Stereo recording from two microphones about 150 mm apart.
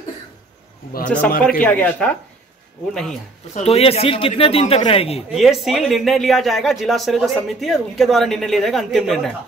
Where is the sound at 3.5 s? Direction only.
45° left (ahead or behind).